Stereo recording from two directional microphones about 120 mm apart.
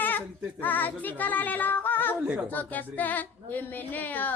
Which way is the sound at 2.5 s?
15° left (ahead or behind).